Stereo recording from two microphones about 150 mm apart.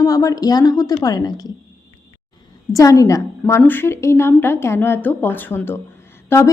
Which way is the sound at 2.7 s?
20° left (ahead or behind).